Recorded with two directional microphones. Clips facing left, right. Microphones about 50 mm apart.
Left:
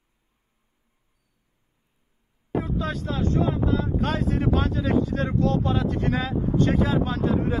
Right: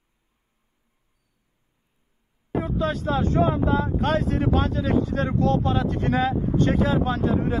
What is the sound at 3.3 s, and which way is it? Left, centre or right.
Speech, right.